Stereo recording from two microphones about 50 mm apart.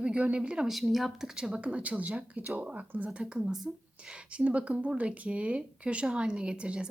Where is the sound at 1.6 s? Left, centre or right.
Right.